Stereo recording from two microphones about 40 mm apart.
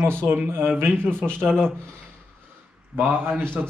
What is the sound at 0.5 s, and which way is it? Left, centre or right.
Speech, right.